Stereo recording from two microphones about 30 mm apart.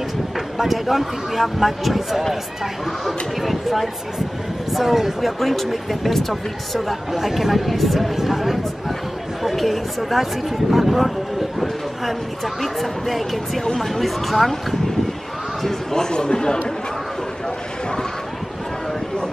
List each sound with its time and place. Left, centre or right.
0.6 s speech: centre
3.3 s speech: centre
5.4 s speech: centre
6.9 s speech: centre
8.2 s speech: centre
15.9 s speech: left